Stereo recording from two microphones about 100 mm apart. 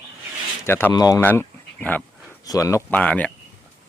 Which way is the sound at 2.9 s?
15° left (ahead or behind).